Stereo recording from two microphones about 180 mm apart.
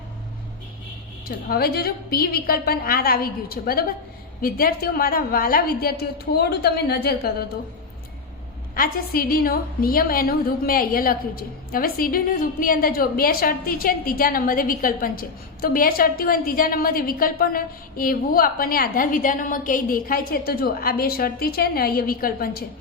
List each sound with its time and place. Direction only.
1.5 s a woman's voice: 60° left (ahead or behind)
8.7 s a woman's voice: 55° left (ahead or behind)